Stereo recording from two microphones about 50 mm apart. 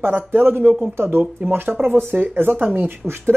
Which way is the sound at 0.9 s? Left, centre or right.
Right.